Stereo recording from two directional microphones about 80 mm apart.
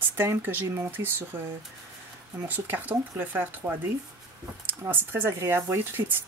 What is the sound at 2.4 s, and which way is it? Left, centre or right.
Speech, right.